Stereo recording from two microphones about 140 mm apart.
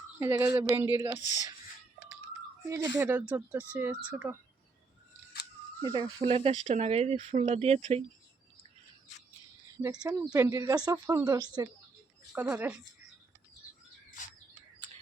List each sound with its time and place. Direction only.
0.2 s speech: 20° right (ahead or behind)
2.6 s speech: 20° right (ahead or behind)
5.8 s speech: 30° right (ahead or behind)
6.3 s speech: 50° right (ahead or behind)
9.8 s speech: 25° right (ahead or behind)
12.3 s speech: 10° right (ahead or behind)